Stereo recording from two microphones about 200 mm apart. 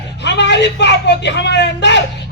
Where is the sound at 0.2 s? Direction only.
60° left (ahead or behind).